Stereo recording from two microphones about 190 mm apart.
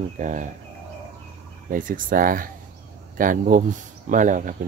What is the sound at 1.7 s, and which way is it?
Speech, 45° right (ahead or behind).